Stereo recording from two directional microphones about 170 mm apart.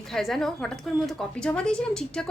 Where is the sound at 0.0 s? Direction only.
Centre (ahead or behind).